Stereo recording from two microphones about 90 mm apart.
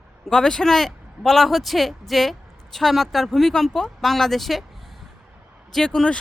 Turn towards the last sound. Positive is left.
turn(degrees=10)  # may be behind; listen again after turning